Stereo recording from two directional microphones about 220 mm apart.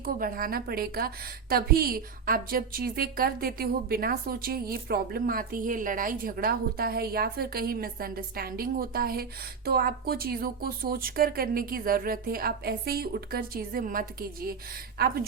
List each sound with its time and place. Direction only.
0.0 s a woman's voice: 40° right (ahead or behind)